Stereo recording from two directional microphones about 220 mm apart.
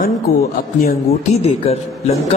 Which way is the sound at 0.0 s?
45° left (ahead or behind).